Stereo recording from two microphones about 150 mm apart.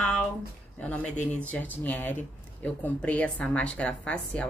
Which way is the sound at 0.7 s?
10° left (ahead or behind).